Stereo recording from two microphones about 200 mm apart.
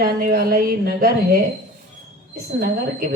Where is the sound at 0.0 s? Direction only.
45° right (ahead or behind).